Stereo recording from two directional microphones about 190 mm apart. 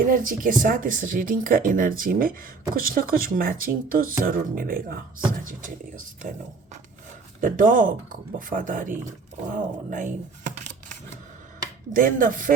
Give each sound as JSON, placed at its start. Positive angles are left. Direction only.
{"t": 0.0, "sound": "speech", "side_deg": -45}
{"t": 7.4, "sound": "speech", "side_deg": -45}
{"t": 11.9, "sound": "speech", "side_deg": -45}